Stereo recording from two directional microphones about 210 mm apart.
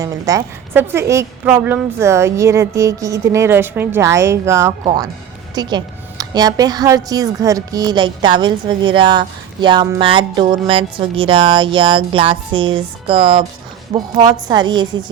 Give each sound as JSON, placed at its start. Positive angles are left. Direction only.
{"t": 0.0, "sound": "a woman's voice", "side_deg": -15}